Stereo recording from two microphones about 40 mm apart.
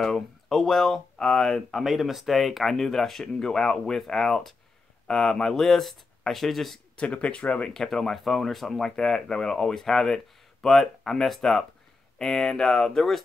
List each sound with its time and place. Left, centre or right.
0.0 s speech: centre
1.8 s speech: centre
5.6 s speech: centre
7.0 s speech: left
7.7 s speech: centre
8.8 s speech: centre